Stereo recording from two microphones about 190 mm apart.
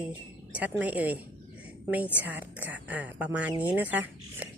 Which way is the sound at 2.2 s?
10° right (ahead or behind).